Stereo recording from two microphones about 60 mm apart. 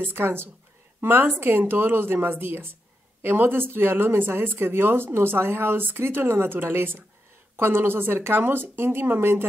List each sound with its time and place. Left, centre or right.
0.0 s speech: right